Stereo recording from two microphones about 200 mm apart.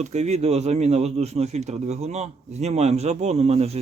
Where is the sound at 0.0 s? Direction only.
35° right (ahead or behind).